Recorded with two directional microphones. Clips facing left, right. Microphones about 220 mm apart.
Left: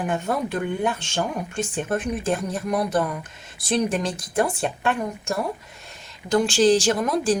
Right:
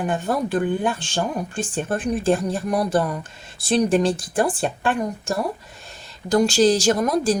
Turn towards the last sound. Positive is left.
turn(degrees=-40)  # may be behind; listen again after turning